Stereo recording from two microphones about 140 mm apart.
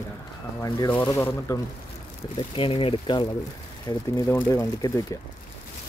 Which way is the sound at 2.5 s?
40° left (ahead or behind).